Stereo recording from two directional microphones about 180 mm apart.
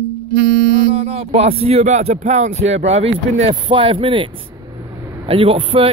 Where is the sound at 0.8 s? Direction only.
35° right (ahead or behind).